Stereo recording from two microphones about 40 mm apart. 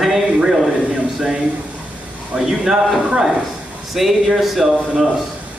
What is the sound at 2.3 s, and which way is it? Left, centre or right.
Speech, centre.